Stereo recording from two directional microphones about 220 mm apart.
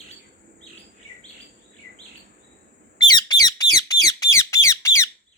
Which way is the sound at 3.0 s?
20° left (ahead or behind).